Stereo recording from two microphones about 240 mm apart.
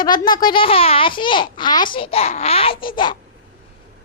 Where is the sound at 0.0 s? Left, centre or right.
Centre.